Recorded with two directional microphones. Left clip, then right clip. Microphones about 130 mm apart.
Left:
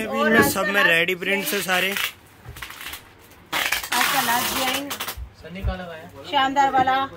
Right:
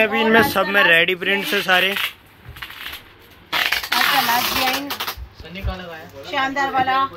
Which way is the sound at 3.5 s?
20° left (ahead or behind).